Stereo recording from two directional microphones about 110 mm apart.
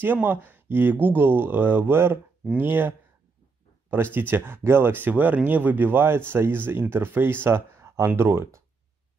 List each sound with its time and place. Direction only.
0.0 s speech: 20° right (ahead or behind)